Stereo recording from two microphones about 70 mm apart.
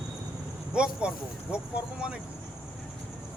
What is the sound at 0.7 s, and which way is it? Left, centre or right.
A man's voice, centre.